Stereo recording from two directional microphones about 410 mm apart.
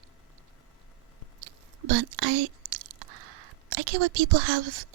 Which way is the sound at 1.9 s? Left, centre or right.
Right.